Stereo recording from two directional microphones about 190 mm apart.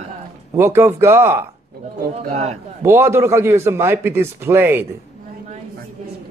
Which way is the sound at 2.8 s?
15° right (ahead or behind).